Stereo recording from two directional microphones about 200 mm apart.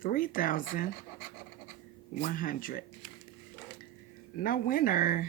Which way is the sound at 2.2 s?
45° left (ahead or behind).